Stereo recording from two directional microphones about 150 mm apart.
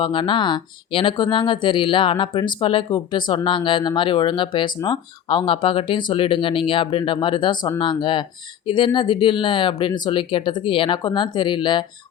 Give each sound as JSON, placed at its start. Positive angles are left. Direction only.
{"t": 0.0, "sound": "speech", "side_deg": 35}